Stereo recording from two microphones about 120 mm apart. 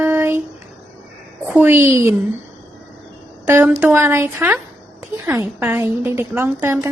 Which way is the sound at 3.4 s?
15° right (ahead or behind).